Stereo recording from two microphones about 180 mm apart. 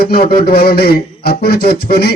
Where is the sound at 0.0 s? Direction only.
60° left (ahead or behind).